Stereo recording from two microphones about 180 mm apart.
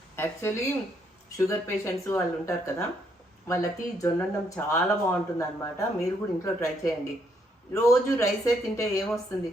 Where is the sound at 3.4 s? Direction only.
15° left (ahead or behind).